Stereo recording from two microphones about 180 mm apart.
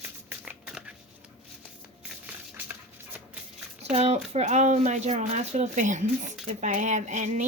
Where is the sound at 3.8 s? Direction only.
35° right (ahead or behind).